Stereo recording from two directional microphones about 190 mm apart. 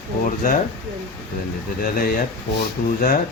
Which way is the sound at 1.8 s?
50° left (ahead or behind).